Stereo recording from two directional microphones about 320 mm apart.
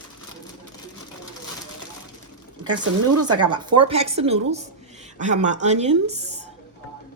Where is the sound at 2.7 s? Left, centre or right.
Right.